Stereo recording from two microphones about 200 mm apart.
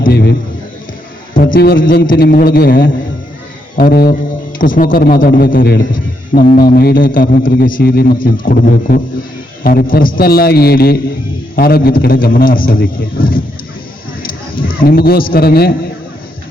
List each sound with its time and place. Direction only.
0.0 s a sound: 55° left (ahead or behind)
1.3 s a man's voice: 45° left (ahead or behind)
14.5 s a man's voice: 45° left (ahead or behind)